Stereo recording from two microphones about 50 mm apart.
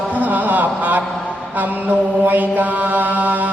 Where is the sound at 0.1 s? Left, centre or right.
Right.